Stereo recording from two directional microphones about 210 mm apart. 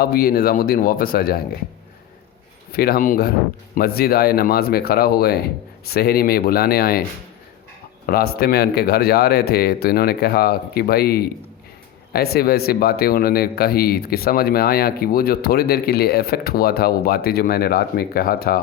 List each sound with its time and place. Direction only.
0.0 s a man's voice: 45° left (ahead or behind)
2.7 s a man's voice: 45° left (ahead or behind)
8.0 s a man's voice: 45° left (ahead or behind)